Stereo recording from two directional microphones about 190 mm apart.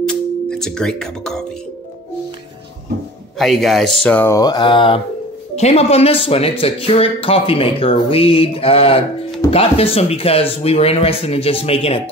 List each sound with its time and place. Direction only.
0.0 s music: 5° left (ahead or behind)
3.3 s speech: centre (ahead or behind)
4.4 s speech: 20° left (ahead or behind)